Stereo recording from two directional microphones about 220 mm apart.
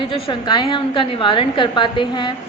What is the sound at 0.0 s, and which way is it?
A woman's voice, 25° left (ahead or behind).